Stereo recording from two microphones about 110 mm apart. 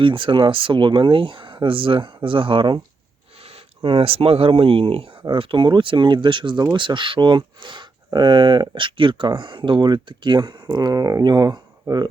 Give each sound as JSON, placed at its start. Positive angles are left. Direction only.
{"t": 0.0, "sound": "speech", "side_deg": -50}
{"t": 3.3, "sound": "a sound", "side_deg": -65}
{"t": 3.8, "sound": "speech", "side_deg": -60}